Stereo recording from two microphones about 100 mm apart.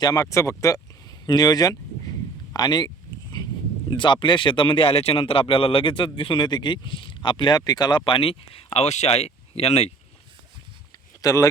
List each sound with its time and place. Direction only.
0.0 s speech: 40° left (ahead or behind); by 9.9 s 90° left
11.2 s speech: 35° left (ahead or behind)